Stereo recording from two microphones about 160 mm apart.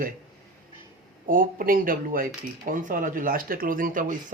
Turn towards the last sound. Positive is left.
turn(degrees=-60)  # may be behind; listen again after turning